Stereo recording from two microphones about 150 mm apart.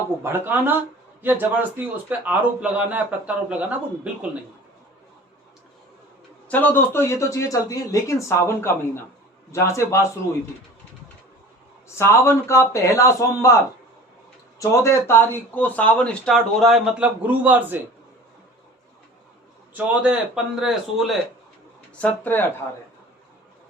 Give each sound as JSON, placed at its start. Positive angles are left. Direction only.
{"t": 0.2, "sound": "a man's voice", "side_deg": -15}
{"t": 6.5, "sound": "speech", "side_deg": 10}
{"t": 11.9, "sound": "speech", "side_deg": 15}
{"t": 14.6, "sound": "speech", "side_deg": 20}
{"t": 19.7, "sound": "speech", "side_deg": -5}
{"t": 21.9, "sound": "speech", "side_deg": 10}